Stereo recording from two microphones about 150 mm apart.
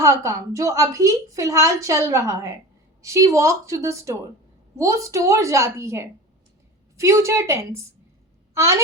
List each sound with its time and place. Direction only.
0.0 s a woman's voice: 20° right (ahead or behind)